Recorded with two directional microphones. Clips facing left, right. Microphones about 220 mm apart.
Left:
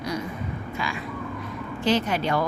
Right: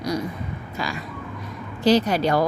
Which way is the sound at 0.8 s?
40° right (ahead or behind).